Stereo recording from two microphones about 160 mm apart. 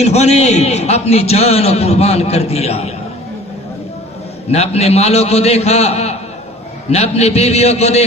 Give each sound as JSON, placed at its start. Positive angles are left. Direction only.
{"t": 0.0, "sound": "a man's voice", "side_deg": 45}
{"t": 4.5, "sound": "a man's voice", "side_deg": 40}